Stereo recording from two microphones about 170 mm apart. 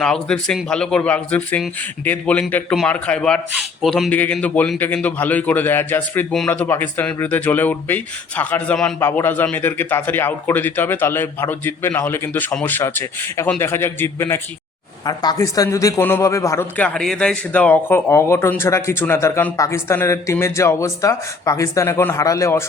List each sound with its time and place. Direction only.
0.0 s a man's voice: 5° left (ahead or behind)